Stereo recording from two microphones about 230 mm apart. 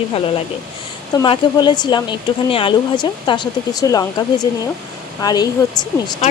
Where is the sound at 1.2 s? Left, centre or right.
Centre.